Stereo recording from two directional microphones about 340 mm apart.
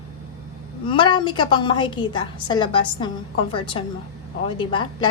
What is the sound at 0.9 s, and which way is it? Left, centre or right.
A woman's voice, centre.